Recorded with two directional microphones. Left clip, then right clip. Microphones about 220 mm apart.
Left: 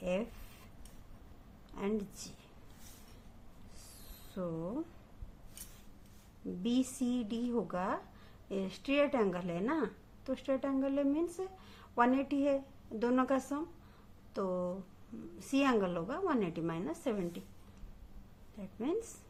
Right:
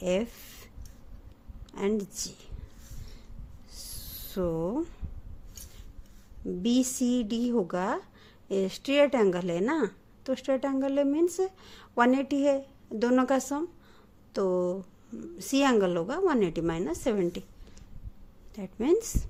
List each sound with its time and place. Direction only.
0.0 s a woman's voice: 40° right (ahead or behind)
1.7 s a woman's voice: 40° right (ahead or behind)
4.4 s a woman's voice: 45° right (ahead or behind)
6.6 s a woman's voice: 40° right (ahead or behind)
18.5 s a woman's voice: 45° right (ahead or behind)